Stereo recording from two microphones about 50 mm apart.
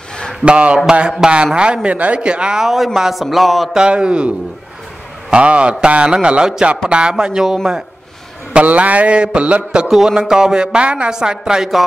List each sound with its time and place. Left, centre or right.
0.5 s speech: right
2.6 s a man's voice: centre
3.7 s speech: centre
5.3 s a woman's voice: right
8.6 s a woman's voice: right; by 11.8 s centre